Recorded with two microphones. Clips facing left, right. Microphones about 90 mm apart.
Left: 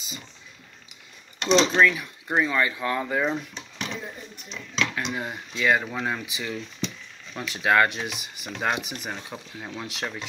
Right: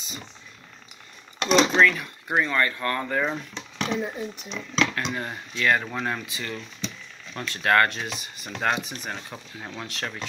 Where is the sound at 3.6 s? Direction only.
65° right (ahead or behind).